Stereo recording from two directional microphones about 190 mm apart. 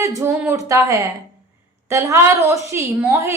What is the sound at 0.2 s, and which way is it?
A woman's voice, 15° right (ahead or behind).